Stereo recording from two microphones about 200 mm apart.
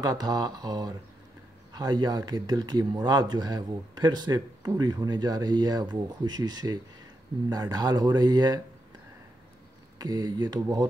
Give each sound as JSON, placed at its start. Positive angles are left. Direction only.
{"t": 0.0, "sound": "speech", "side_deg": -20}
{"t": 9.9, "sound": "speech", "side_deg": -20}